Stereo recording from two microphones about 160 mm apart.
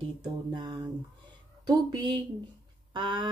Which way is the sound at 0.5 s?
30° right (ahead or behind).